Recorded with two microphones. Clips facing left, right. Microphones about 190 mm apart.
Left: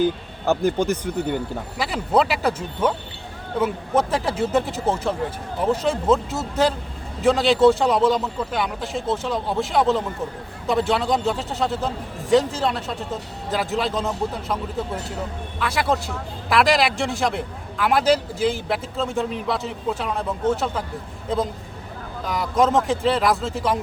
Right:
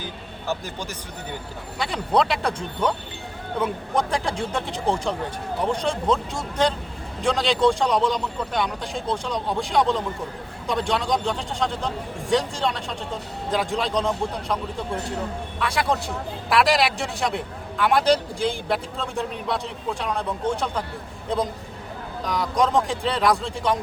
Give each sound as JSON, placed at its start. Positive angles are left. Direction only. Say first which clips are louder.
{"t": 0.0, "sound": "speech", "louder": "left 12 dB", "side_deg": 55}
{"t": 1.8, "sound": "a man's voice", "louder": "left 2 dB", "side_deg": 5}
{"t": 22.2, "sound": "a man's voice", "louder": "left 2 dB", "side_deg": 5}